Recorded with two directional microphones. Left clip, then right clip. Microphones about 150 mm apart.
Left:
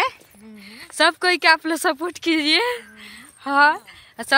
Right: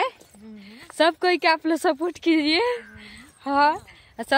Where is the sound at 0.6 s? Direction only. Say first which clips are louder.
Left 2 dB; 20° right (ahead or behind); by 3.8 s 5° right (ahead or behind).